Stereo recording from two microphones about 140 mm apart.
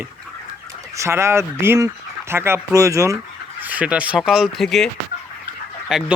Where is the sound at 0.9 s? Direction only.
20° right (ahead or behind).